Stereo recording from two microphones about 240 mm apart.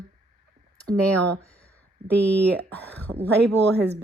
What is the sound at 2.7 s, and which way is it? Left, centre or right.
Speech, centre.